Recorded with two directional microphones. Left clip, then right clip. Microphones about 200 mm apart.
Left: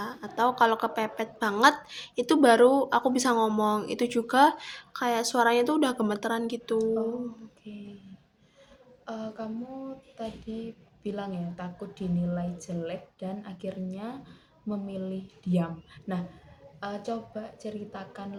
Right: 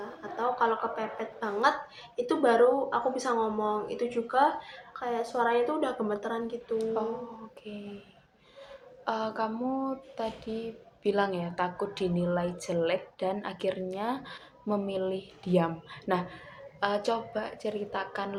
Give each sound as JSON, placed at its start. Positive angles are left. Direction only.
{"t": 0.0, "sound": "a woman's voice", "side_deg": 60}
{"t": 9.0, "sound": "speech", "side_deg": 0}